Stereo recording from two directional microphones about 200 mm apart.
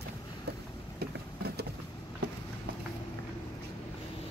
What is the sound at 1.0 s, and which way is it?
Vehicle, 50° right (ahead or behind).